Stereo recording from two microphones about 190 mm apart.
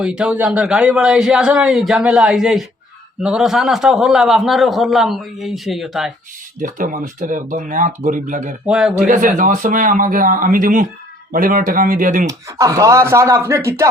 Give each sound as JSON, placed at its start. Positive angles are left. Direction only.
{"t": 0.0, "sound": "a man's voice", "side_deg": -5}
{"t": 6.6, "sound": "speech", "side_deg": -45}
{"t": 8.6, "sound": "a man's voice", "side_deg": -5}
{"t": 9.0, "sound": "speech", "side_deg": -45}
{"t": 12.3, "sound": "speech", "side_deg": -15}